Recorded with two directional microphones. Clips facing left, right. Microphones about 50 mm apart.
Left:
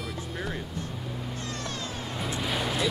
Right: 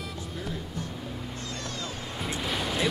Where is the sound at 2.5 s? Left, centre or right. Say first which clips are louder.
Left 1 dB; centre.